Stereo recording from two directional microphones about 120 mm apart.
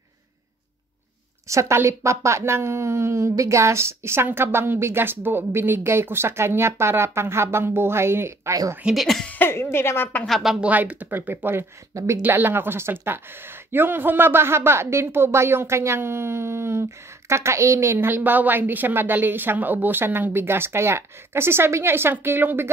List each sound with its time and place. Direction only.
1.5 s speech: 25° right (ahead or behind)
8.8 s speech: centre (ahead or behind); by 10.2 s 20° left (ahead or behind)
10.2 s speech: centre (ahead or behind)
10.7 s a woman's voice: 15° right (ahead or behind)